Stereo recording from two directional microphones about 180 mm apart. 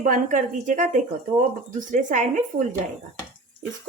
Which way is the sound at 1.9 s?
45° right (ahead or behind).